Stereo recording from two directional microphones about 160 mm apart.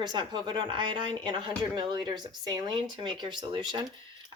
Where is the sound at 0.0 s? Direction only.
25° right (ahead or behind).